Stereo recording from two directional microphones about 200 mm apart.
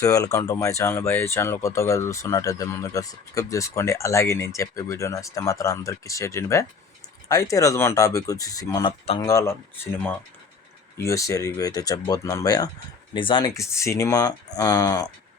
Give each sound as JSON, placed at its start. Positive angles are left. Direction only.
{"t": 0.0, "sound": "speech", "side_deg": 15}